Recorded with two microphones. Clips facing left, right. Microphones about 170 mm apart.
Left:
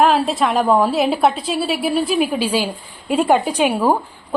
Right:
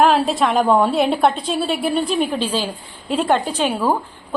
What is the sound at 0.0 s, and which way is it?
A woman's voice, centre (ahead or behind).